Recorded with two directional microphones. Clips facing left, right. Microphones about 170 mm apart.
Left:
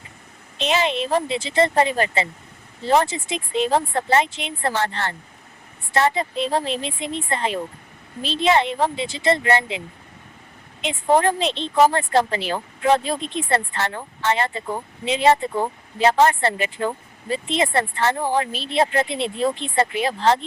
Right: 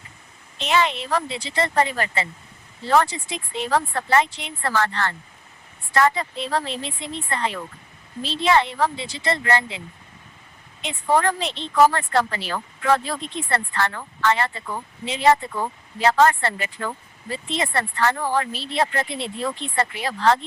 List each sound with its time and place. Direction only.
0.6 s a woman's voice: 20° left (ahead or behind)